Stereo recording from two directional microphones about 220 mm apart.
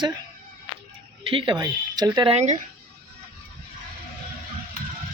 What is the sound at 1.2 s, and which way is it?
Speech, 20° right (ahead or behind).